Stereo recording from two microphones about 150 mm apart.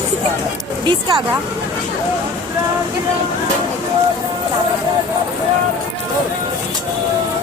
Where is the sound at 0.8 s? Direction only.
30° right (ahead or behind).